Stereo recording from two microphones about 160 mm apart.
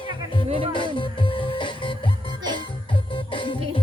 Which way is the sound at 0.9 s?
30° left (ahead or behind).